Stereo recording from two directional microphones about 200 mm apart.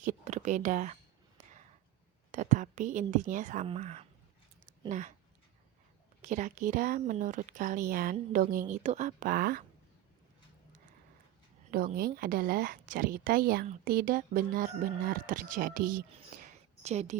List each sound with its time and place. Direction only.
0.0 s speech: 40° right (ahead or behind)
2.3 s speech: 35° right (ahead or behind)
6.2 s speech: 40° right (ahead or behind)
11.7 s speech: 45° right (ahead or behind)
16.8 s speech: 35° right (ahead or behind)